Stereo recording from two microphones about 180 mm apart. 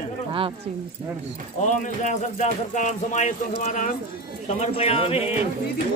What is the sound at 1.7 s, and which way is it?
Speech, 40° left (ahead or behind).